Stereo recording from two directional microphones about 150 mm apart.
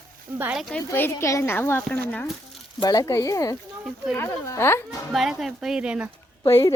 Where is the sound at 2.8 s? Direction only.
25° left (ahead or behind).